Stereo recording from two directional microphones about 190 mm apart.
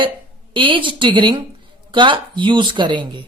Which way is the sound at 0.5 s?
25° right (ahead or behind).